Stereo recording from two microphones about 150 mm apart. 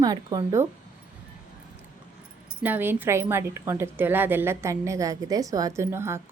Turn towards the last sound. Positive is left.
turn(degrees=-15)  # may be behind; listen again after turning